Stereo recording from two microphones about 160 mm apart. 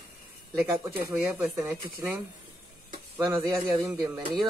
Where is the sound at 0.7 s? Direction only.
15° right (ahead or behind).